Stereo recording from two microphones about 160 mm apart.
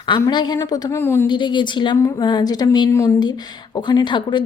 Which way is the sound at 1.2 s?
30° left (ahead or behind).